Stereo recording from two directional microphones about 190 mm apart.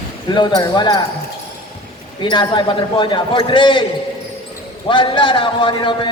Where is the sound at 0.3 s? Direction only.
20° left (ahead or behind).